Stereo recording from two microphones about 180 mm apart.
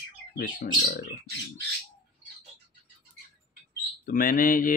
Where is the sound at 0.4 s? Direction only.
55° left (ahead or behind).